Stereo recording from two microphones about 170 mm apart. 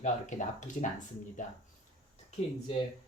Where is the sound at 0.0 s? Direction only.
45° left (ahead or behind).